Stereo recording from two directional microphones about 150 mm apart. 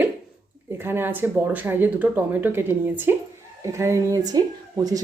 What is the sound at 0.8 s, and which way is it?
A woman's voice, 15° right (ahead or behind).